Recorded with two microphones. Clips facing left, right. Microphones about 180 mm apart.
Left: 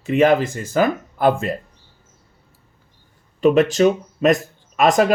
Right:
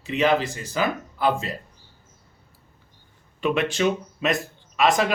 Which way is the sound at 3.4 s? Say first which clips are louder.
Left 8 dB; 40° left (ahead or behind).